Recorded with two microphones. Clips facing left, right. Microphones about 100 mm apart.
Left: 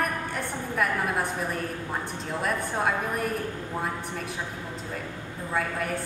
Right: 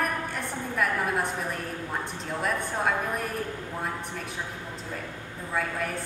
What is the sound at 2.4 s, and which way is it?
Speech, centre (ahead or behind).